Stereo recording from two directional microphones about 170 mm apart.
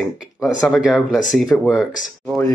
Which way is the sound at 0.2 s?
Centre (ahead or behind).